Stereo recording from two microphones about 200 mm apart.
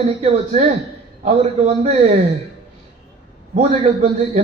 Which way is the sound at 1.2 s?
35° right (ahead or behind).